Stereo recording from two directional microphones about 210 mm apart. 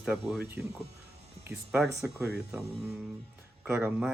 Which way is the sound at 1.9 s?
15° right (ahead or behind).